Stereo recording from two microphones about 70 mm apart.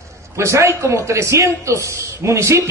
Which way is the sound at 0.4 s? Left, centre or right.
Right.